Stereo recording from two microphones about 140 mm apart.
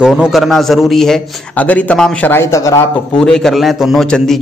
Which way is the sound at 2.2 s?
20° left (ahead or behind).